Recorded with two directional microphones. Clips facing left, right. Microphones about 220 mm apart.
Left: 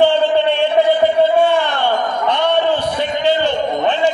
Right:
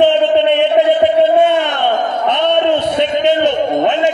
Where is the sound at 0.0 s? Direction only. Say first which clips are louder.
Right 2 dB; 20° right (ahead or behind).